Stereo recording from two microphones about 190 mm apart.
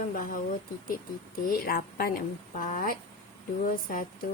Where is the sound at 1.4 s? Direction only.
50° left (ahead or behind).